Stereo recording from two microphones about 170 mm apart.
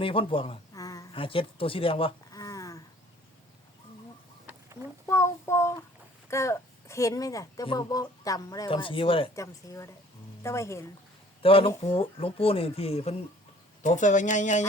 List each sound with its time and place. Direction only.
0.0 s speech: 30° left (ahead or behind)
0.7 s a sound: 20° left (ahead or behind)
1.1 s speech: 30° left (ahead or behind)
2.3 s a sound: 20° left (ahead or behind)
5.0 s child singing: 15° left (ahead or behind)
6.3 s a woman's voice: 15° left (ahead or behind)
9.3 s a woman's voice: 20° left (ahead or behind)
11.4 s speech: 30° left (ahead or behind)